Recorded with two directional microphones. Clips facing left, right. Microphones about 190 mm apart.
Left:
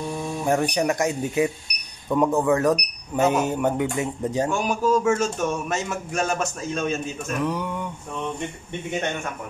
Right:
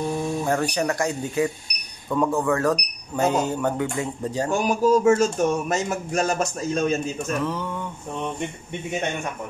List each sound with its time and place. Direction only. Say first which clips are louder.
0.5 s speech: left 4 dB; 15° left (ahead or behind)
4.5 s speech: right 5 dB; 35° right (ahead or behind)
7.3 s speech: left 1 dB; 15° left (ahead or behind)